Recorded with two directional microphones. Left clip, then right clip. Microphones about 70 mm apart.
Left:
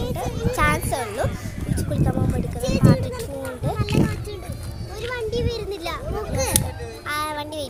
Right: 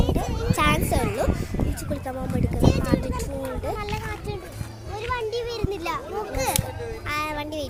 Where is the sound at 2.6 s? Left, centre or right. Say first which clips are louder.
Even; right.